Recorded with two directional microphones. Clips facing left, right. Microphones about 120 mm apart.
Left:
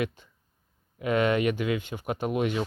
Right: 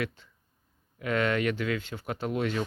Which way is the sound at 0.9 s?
15° left (ahead or behind).